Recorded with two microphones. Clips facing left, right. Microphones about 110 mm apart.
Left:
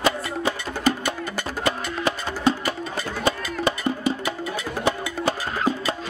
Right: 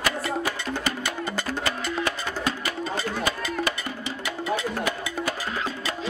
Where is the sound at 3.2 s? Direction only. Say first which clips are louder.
Left 7 dB; 25° left (ahead or behind).